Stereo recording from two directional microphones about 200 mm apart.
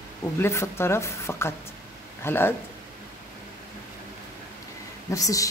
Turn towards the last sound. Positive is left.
turn(degrees=15)  # may be behind; listen again after turning